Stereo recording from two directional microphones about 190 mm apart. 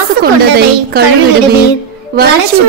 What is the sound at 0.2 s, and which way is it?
Speech, 55° right (ahead or behind).